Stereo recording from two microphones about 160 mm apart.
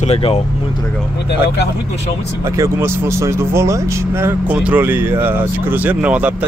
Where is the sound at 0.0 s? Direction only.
40° left (ahead or behind).